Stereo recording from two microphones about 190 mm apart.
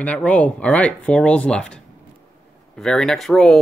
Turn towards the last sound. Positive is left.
turn(degrees=0)  # may be behind; listen again after turning